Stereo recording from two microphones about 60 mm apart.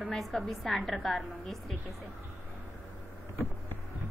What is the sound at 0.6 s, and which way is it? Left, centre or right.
Speech, centre.